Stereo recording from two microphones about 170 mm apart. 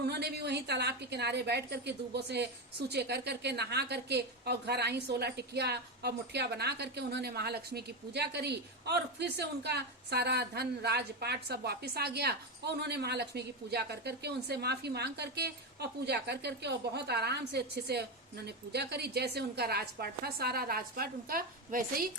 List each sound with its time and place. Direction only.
0.1 s a woman's voice: 70° right (ahead or behind); by 22.1 s 55° right (ahead or behind)